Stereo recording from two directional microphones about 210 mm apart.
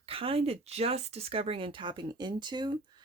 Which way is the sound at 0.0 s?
25° right (ahead or behind).